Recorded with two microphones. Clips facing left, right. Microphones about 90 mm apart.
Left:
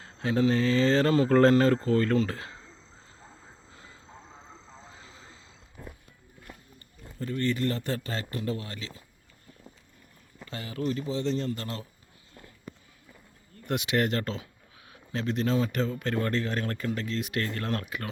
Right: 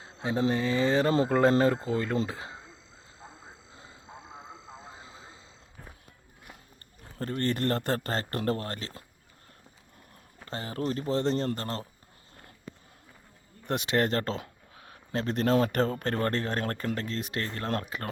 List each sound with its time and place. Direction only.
0.0 s speech: 20° right (ahead or behind)
4.0 s vehicle: 10° right (ahead or behind)
7.2 s speech: 50° right (ahead or behind)
8.3 s speech: 55° right (ahead or behind)
10.4 s speech: 40° right (ahead or behind)
13.7 s speech: 35° right (ahead or behind)